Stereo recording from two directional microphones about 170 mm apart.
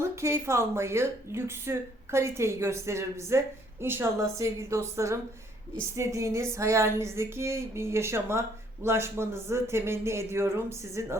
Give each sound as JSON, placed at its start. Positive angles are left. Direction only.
{"t": 0.0, "sound": "speech", "side_deg": -15}